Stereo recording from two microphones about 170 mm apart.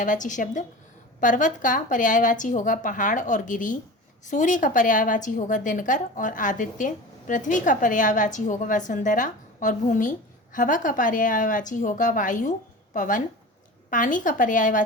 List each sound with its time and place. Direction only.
0.0 s a woman's voice: 50° left (ahead or behind)